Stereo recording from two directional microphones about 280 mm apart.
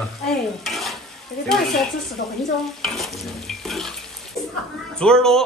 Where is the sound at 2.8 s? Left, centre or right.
Centre.